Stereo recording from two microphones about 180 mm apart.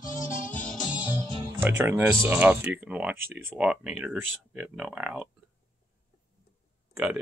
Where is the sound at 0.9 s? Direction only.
10° right (ahead or behind).